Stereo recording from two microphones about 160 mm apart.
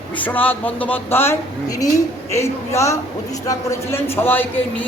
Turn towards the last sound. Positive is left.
turn(degrees=10)  # may be behind; listen again after turning